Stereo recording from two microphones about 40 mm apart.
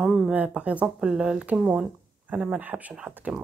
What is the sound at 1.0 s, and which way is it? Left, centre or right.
Speech, centre.